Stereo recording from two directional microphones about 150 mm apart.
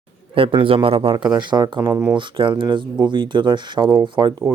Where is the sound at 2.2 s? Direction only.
35° right (ahead or behind).